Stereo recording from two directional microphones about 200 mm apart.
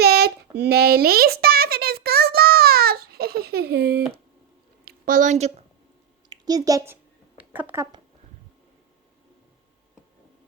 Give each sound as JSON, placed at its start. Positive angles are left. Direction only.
{"t": 0.0, "sound": "a sound", "side_deg": -55}
{"t": 4.9, "sound": "a woman's voice", "side_deg": -40}
{"t": 6.3, "sound": "a woman's voice", "side_deg": -20}